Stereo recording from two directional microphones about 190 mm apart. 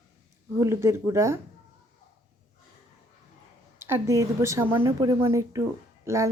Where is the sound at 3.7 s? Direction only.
15° right (ahead or behind).